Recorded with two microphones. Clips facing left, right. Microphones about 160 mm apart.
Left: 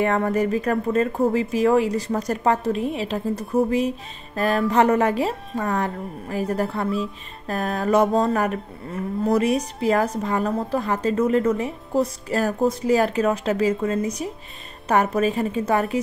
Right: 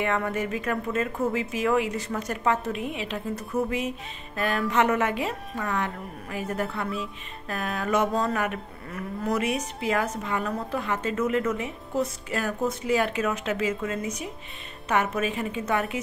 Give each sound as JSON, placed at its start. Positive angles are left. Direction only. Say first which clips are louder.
{"t": 0.0, "sound": "cattle", "louder": "left 6 dB", "side_deg": 35}